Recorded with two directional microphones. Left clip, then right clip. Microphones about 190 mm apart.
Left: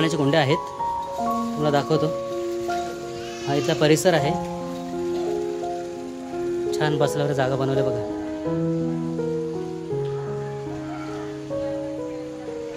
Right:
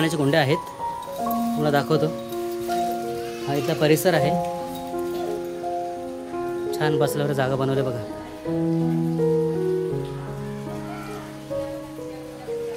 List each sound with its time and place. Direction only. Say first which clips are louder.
0.0 s speech: even; centre (ahead or behind)
1.6 s speech: even; centre (ahead or behind)
3.4 s speech: left 1 dB; 10° left (ahead or behind)
6.7 s speech: right 1 dB; 5° left (ahead or behind)